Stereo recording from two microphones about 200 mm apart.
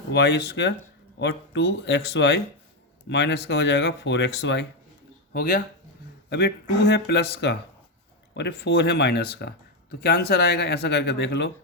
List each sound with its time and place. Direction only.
0.1 s speech: 60° left (ahead or behind)